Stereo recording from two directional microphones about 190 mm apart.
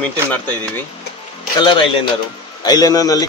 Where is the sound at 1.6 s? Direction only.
25° left (ahead or behind).